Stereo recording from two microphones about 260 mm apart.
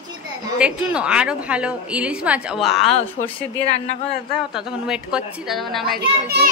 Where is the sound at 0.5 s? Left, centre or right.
Centre.